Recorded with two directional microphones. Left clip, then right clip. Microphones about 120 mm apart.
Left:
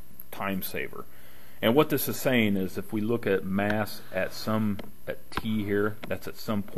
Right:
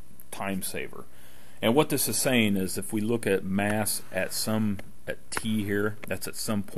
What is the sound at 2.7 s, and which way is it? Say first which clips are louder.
Speech: even; 55° right (ahead or behind).